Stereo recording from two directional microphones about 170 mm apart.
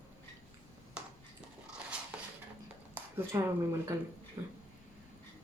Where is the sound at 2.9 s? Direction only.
15° right (ahead or behind).